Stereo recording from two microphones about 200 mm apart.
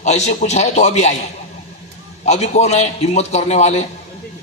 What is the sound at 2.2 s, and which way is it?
A man's voice, 35° left (ahead or behind).